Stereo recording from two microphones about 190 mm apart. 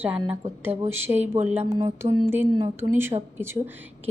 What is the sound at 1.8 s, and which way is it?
Speech, 30° right (ahead or behind).